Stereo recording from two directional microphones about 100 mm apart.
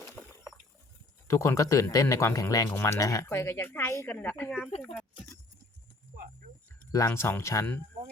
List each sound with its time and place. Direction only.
0.2 s a sound: 20° left (ahead or behind)
1.3 s speech: 30° left (ahead or behind)
6.9 s speech: 30° left (ahead or behind)